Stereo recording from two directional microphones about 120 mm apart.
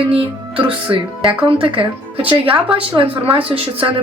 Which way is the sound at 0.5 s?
45° right (ahead or behind).